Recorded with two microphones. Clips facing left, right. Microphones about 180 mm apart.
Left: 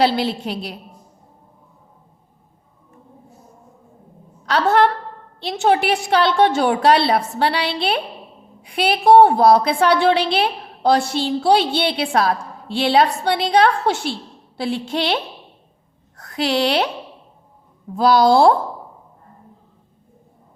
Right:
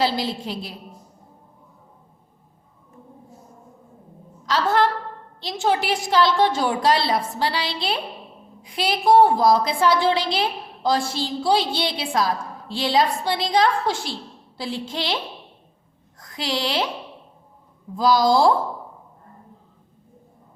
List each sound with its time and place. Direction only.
0.0 s a woman's voice: 65° left (ahead or behind)
4.4 s a woman's voice: 65° left (ahead or behind)
17.9 s a woman's voice: 65° left (ahead or behind)